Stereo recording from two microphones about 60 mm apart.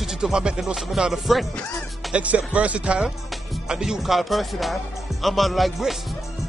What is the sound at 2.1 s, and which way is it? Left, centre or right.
Speech, right.